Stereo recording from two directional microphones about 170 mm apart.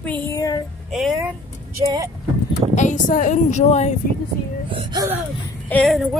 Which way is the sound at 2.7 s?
45° left (ahead or behind).